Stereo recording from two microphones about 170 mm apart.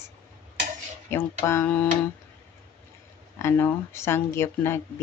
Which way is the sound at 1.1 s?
15° left (ahead or behind).